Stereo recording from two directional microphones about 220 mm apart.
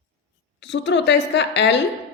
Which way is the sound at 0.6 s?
55° left (ahead or behind).